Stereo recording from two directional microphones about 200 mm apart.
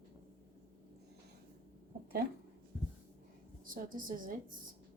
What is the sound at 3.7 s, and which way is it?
Speech, 45° right (ahead or behind).